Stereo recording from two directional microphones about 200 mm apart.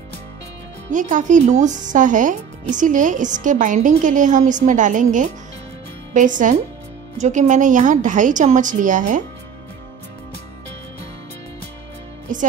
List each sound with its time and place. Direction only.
0.9 s speech: 40° right (ahead or behind)
12.3 s speech: 40° right (ahead or behind)